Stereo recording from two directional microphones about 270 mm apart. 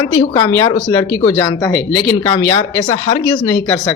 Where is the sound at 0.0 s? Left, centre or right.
Centre.